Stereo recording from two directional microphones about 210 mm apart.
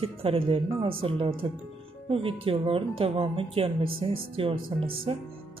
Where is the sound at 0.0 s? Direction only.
25° right (ahead or behind).